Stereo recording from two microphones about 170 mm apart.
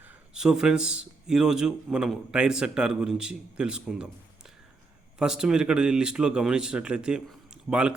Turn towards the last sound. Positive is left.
turn(degrees=-5)  # may be behind; listen again after turning